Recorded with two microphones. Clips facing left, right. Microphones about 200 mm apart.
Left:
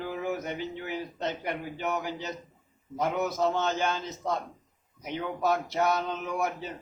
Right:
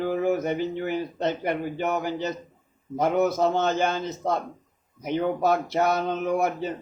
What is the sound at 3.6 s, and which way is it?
A man's voice, 55° right (ahead or behind).